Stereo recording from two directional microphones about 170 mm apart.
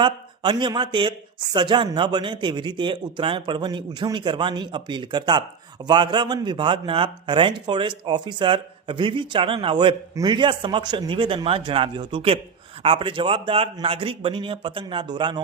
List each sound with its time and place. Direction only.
0.0 s speech: 25° right (ahead or behind)